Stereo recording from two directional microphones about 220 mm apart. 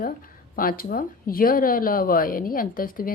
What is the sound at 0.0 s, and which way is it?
A woman's voice, 40° left (ahead or behind).